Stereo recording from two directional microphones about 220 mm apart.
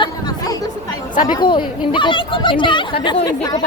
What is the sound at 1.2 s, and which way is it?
Speech, 20° left (ahead or behind).